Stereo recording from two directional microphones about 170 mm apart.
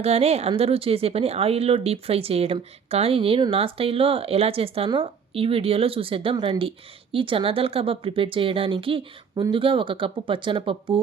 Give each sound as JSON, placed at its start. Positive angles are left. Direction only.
{"t": 0.0, "sound": "speech", "side_deg": -40}